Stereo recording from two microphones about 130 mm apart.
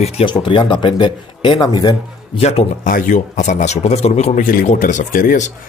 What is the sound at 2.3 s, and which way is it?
Speech, 50° left (ahead or behind).